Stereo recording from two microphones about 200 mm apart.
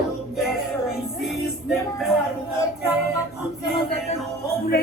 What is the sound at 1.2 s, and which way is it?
Music, centre (ahead or behind).